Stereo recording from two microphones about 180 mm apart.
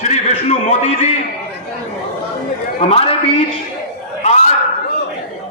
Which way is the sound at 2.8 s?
30° left (ahead or behind).